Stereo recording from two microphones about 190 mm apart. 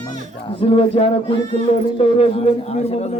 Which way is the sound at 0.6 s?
30° left (ahead or behind).